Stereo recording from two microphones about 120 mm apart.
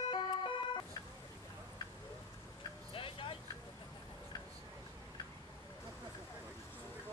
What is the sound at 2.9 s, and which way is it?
Vehicle, 50° left (ahead or behind).